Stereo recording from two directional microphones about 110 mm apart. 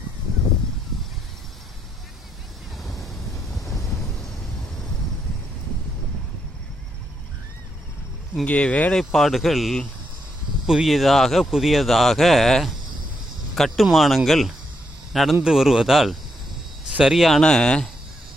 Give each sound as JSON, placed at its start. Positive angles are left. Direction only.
{"t": 3.6, "sound": "vehicle", "side_deg": 30}
{"t": 8.4, "sound": "speech", "side_deg": 15}
{"t": 9.0, "sound": "a man's voice", "side_deg": 0}